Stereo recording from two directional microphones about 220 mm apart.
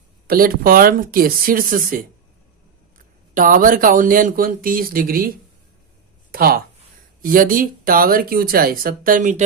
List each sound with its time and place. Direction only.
0.3 s speech: 40° right (ahead or behind)
3.3 s speech: 40° right (ahead or behind)
6.3 s speech: 45° right (ahead or behind)